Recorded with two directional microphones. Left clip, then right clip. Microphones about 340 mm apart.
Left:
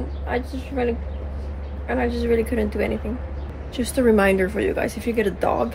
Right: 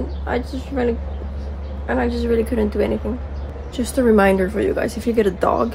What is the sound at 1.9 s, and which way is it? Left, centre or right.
Speech, centre.